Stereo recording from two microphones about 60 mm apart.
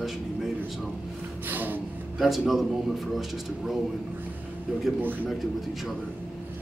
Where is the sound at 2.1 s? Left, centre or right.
Centre.